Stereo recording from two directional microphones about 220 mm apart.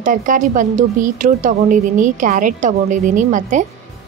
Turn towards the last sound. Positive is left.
turn(degrees=-35)  # may be behind; listen again after turning